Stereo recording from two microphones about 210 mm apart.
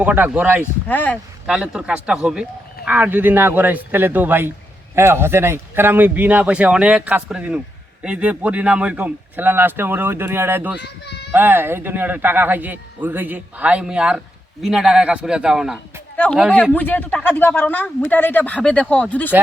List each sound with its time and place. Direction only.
0.0 s speech: 5° right (ahead or behind)
0.6 s speech: 10° left (ahead or behind)
1.5 s speech: 5° right (ahead or behind)
10.8 s a child's voice: 55° left (ahead or behind)
11.3 s a man's voice: 10° right (ahead or behind); by 19.3 s 5° left (ahead or behind)